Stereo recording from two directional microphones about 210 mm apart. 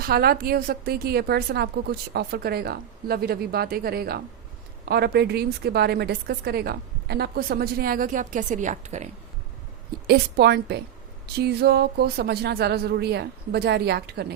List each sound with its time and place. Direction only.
0.0 s a woman's voice: 45° right (ahead or behind)
10.1 s a woman's voice: 50° right (ahead or behind)